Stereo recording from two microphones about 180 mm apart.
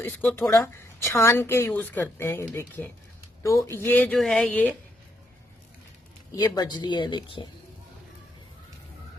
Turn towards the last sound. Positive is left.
turn(degrees=25)  # may be behind; listen again after turning